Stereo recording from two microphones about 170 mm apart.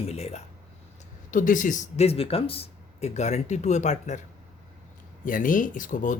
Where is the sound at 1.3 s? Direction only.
50° left (ahead or behind).